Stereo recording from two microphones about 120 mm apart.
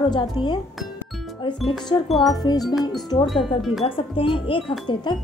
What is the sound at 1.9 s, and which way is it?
Wind chime, 40° left (ahead or behind).